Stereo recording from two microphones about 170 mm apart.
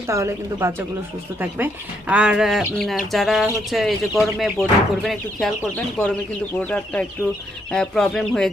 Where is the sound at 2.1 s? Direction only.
5° right (ahead or behind).